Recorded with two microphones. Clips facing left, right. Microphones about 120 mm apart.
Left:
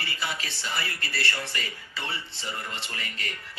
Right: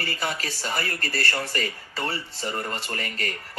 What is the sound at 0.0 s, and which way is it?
Speech, 40° right (ahead or behind).